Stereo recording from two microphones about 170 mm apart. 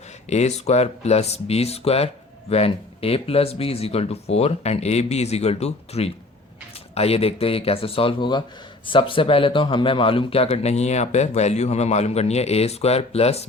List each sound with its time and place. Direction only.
0.3 s a man's voice: 40° left (ahead or behind)